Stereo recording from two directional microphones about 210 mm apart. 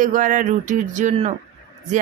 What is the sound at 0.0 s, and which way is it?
Speech, 40° right (ahead or behind).